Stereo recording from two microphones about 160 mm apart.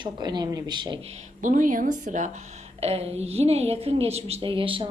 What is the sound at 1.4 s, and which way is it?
Speech, 55° right (ahead or behind).